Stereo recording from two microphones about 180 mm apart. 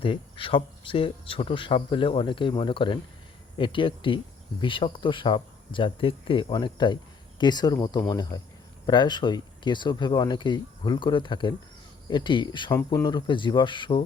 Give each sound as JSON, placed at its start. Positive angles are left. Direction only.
{"t": 0.0, "sound": "speech", "side_deg": 30}